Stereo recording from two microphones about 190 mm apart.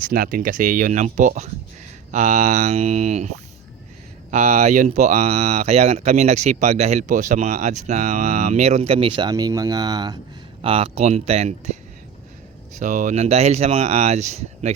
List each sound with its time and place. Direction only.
0.0 s speech: 45° right (ahead or behind)
12.8 s speech: 40° right (ahead or behind)